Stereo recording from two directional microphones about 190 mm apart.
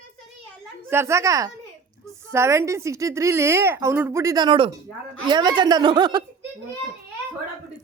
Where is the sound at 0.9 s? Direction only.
15° right (ahead or behind).